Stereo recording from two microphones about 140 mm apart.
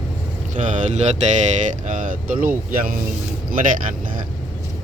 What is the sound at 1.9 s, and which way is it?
Speech, 65° right (ahead or behind).